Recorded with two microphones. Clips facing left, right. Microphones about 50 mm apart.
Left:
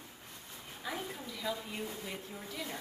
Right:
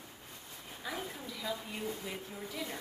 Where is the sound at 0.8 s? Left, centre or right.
Centre.